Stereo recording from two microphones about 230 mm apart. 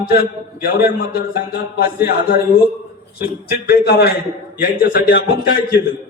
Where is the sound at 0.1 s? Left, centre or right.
Left.